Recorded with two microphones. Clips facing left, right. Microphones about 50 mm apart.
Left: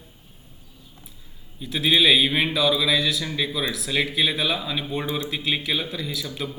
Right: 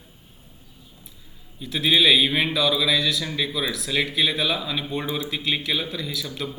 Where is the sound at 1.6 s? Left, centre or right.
Centre.